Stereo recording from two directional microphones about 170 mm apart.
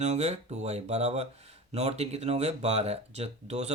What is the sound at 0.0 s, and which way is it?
Speech, 40° right (ahead or behind).